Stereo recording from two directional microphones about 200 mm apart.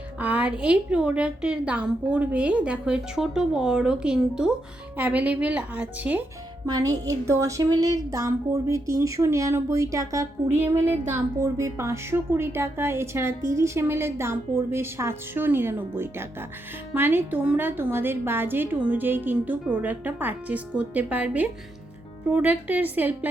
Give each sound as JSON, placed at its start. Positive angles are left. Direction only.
{"t": 0.2, "sound": "a woman's voice", "side_deg": -5}
{"t": 6.7, "sound": "a woman's voice", "side_deg": -20}